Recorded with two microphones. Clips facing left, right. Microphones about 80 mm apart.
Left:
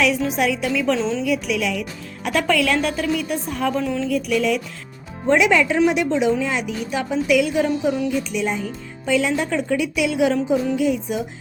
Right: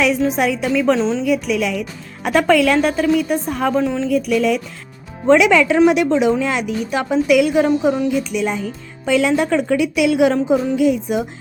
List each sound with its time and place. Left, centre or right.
0.3 s a woman's voice: right
1.3 s a woman's voice: right
5.3 s a woman's voice: right
9.0 s speech: right